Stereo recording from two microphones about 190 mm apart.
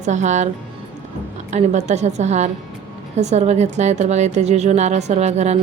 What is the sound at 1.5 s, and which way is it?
A woman's voice, 35° right (ahead or behind).